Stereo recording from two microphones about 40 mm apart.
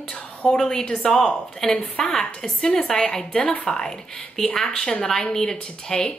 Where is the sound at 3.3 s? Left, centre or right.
Left.